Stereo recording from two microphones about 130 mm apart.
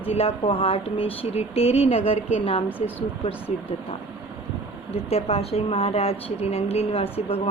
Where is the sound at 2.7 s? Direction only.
15° left (ahead or behind).